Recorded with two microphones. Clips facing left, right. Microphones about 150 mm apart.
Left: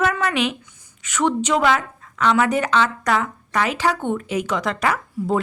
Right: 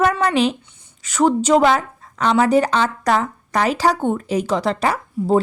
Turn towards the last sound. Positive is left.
turn(degrees=-30)  # may be behind; listen again after turning